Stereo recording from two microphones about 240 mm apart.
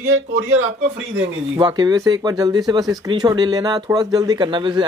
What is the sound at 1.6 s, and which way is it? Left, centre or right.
Speech, centre.